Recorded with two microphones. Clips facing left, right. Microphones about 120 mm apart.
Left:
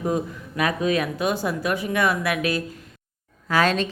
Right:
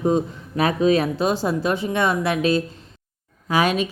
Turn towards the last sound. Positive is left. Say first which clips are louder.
# right 1 dB
turn(degrees=-15)  # may be behind; listen again after turning